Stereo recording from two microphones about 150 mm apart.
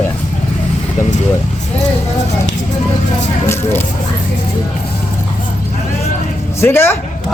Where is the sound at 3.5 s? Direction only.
15° left (ahead or behind).